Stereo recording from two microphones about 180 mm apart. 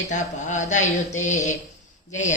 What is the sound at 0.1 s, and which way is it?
Mantra, 40° left (ahead or behind).